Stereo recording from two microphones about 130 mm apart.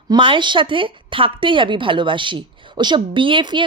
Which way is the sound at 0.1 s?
40° right (ahead or behind).